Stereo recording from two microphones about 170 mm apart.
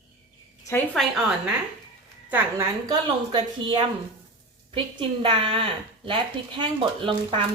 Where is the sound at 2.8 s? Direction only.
25° right (ahead or behind).